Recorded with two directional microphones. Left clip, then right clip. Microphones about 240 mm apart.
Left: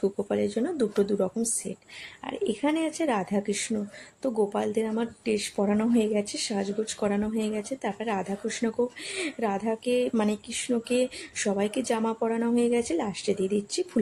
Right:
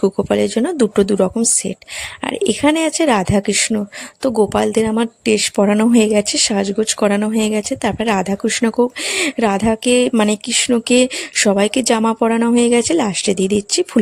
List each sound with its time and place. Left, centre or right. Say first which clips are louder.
0.0 s speech: right 11 dB; right